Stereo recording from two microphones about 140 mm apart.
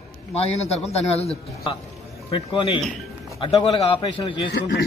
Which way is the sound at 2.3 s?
40° left (ahead or behind).